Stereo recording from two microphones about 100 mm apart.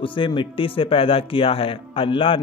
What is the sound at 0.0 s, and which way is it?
Speech, 60° left (ahead or behind).